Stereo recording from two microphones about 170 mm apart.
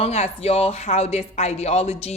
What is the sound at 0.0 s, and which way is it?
Speech, 40° left (ahead or behind).